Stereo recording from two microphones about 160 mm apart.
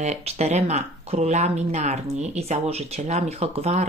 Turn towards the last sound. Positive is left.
turn(degrees=-40)  # may be behind; listen again after turning